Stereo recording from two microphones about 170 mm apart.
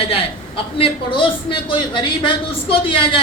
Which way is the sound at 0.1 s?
30° left (ahead or behind).